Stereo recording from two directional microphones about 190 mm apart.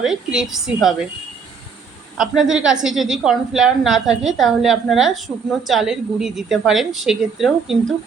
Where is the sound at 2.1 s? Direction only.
5° right (ahead or behind).